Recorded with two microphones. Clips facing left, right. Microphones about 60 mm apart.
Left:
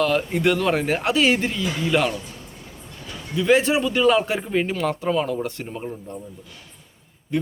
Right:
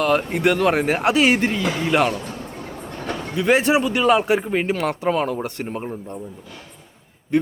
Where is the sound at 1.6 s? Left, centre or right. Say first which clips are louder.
Even; right.